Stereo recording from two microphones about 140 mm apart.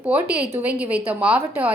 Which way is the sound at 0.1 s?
10° right (ahead or behind).